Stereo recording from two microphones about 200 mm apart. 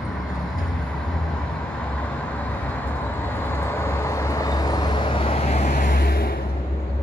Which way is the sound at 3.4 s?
10° left (ahead or behind).